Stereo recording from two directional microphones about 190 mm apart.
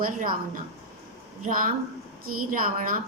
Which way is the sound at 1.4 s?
45° right (ahead or behind).